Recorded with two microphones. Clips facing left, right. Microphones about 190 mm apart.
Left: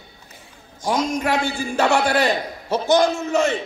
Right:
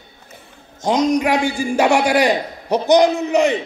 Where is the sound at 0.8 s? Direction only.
20° right (ahead or behind).